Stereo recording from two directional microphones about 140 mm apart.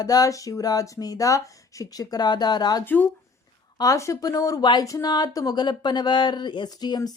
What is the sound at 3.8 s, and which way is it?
Speech, 25° left (ahead or behind).